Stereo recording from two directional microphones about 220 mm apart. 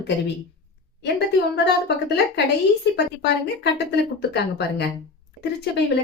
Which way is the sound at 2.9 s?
50° left (ahead or behind).